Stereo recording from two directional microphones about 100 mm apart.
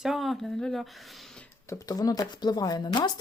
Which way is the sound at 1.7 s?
40° left (ahead or behind).